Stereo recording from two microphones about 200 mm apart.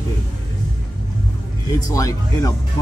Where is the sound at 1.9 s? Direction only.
15° left (ahead or behind).